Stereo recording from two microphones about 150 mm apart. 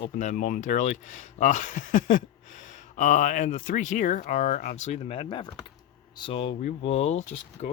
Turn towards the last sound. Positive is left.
turn(degrees=50)  # may be behind; listen again after turning